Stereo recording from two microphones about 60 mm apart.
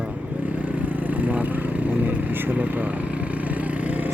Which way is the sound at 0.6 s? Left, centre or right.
Right.